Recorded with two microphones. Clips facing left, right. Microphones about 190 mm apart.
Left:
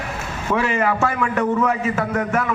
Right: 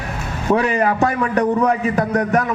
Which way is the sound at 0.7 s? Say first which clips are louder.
Right 3 dB; 35° right (ahead or behind).